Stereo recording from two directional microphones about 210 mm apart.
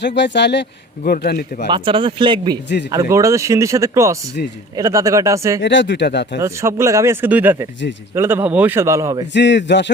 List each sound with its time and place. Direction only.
0.0 s speech: 55° left (ahead or behind)
1.7 s speech: 25° right (ahead or behind)
5.5 s speech: 60° left (ahead or behind)
6.4 s speech: 15° right (ahead or behind)
9.3 s speech: 55° left (ahead or behind)